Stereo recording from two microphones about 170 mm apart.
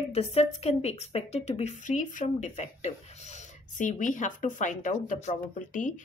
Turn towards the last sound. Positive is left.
turn(degrees=50)  # may be behind; listen again after turning